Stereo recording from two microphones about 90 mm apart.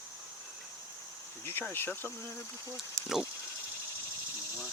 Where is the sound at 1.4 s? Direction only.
25° left (ahead or behind).